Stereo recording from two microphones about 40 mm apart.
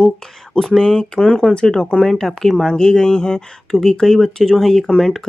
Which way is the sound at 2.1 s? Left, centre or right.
Centre.